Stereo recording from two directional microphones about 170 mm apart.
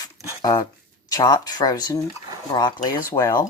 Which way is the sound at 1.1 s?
25° left (ahead or behind).